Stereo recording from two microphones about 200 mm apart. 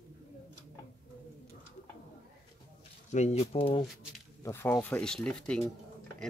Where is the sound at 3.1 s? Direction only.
35° left (ahead or behind).